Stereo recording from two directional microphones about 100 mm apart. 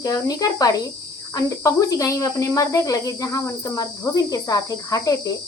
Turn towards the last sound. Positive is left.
turn(degrees=35)  # may be behind; listen again after turning